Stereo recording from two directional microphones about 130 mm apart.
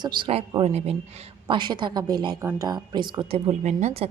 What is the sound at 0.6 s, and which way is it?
Speech, 55° right (ahead or behind).